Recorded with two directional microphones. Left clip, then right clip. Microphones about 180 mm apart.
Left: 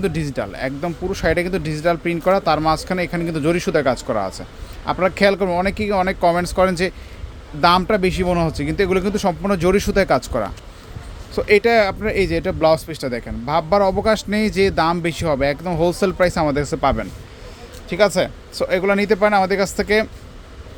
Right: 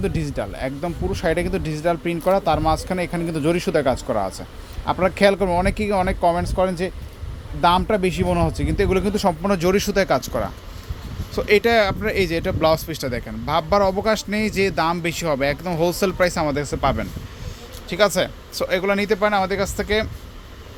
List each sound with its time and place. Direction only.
0.0 s speech: 5° left (ahead or behind)
6.1 s speech: 10° left (ahead or behind)